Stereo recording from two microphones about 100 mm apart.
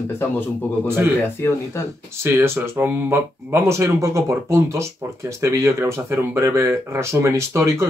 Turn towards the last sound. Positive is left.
turn(degrees=-25)  # may be behind; listen again after turning